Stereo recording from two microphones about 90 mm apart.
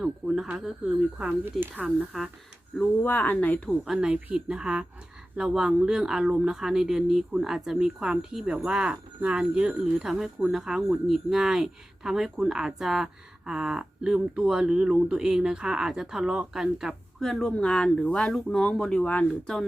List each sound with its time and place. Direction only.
0.0 s speech: 5° right (ahead or behind)
1.5 s speech: 20° right (ahead or behind)
2.7 s speech: 20° left (ahead or behind)
3.8 s speech: 10° right (ahead or behind); by 19.2 s 15° left (ahead or behind)